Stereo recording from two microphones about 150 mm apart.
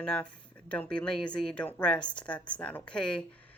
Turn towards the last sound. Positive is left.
turn(degrees=5)  # may be behind; listen again after turning